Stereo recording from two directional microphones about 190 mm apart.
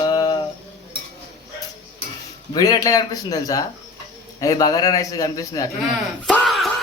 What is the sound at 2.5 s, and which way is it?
Speech, 20° left (ahead or behind).